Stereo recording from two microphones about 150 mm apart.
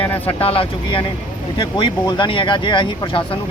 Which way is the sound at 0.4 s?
40° left (ahead or behind).